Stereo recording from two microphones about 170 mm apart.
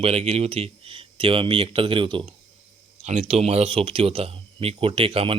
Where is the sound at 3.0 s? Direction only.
40° right (ahead or behind).